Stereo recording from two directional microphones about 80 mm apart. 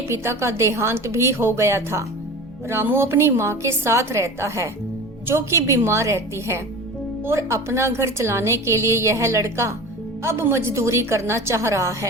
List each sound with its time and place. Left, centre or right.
0.1 s a woman's voice: right